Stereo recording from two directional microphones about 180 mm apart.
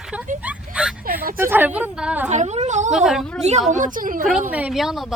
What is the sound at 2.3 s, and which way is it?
Speech, 40° right (ahead or behind).